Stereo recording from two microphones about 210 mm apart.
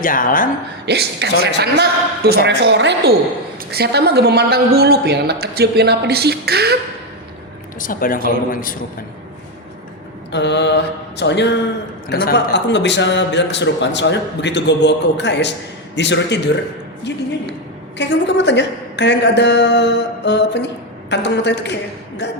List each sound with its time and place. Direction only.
0.0 s speech: 40° left (ahead or behind)
0.9 s a woman's voice: 55° right (ahead or behind)
7.8 s speech: 40° left (ahead or behind)
10.3 s a man's voice: 55° left (ahead or behind)
17.9 s a man's voice: 55° left (ahead or behind)